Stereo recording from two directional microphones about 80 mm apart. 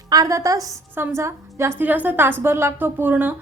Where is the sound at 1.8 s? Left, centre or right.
Right.